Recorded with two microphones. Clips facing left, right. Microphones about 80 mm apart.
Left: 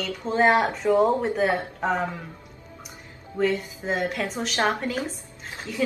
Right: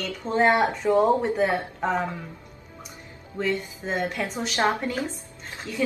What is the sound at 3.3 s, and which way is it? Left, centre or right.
A woman's voice, centre.